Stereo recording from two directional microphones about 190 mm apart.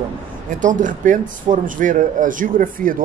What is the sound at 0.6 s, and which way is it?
A man's voice, 45° right (ahead or behind).